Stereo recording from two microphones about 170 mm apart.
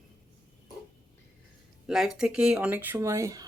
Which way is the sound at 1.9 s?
Centre (ahead or behind).